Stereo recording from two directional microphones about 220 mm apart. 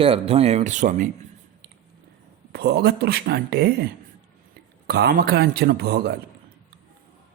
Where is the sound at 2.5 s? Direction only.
45° right (ahead or behind).